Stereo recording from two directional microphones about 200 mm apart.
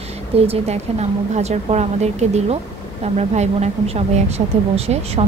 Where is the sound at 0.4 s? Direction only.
30° right (ahead or behind).